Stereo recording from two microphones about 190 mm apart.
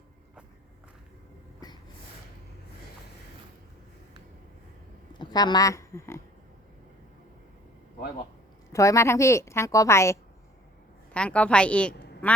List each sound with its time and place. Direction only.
5.1 s a woman's voice: 20° left (ahead or behind)
8.7 s a woman's voice: 15° left (ahead or behind)